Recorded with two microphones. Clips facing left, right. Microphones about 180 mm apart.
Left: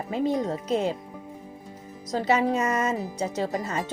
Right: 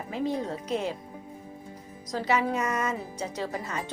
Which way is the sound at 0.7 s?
25° left (ahead or behind).